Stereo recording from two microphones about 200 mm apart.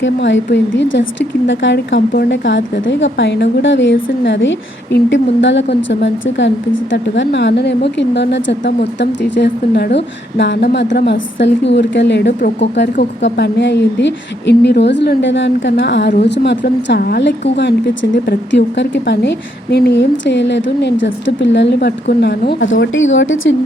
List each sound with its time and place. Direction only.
0.0 s a woman's voice: 65° left (ahead or behind)